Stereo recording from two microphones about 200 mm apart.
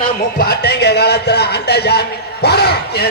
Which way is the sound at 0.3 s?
55° left (ahead or behind).